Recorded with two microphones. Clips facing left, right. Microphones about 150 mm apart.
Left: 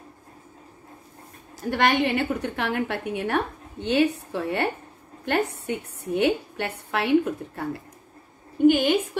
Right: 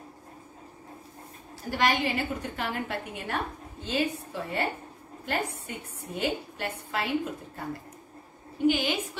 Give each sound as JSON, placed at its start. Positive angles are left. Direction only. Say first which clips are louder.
{"t": 1.7, "sound": "a woman's voice", "louder": "left 5 dB", "side_deg": 60}
{"t": 8.6, "sound": "a woman's voice", "louder": "left 7 dB", "side_deg": 55}